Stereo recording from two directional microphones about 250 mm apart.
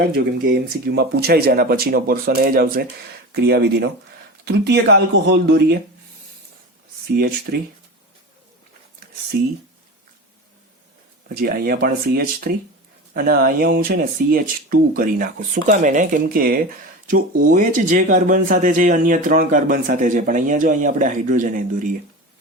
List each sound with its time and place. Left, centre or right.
0.0 s speech: right
7.1 s speech: right
11.3 s speech: right